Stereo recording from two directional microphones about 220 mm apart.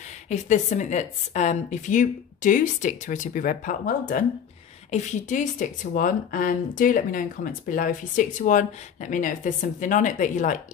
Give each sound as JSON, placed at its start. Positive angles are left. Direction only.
{"t": 0.3, "sound": "speech", "side_deg": 30}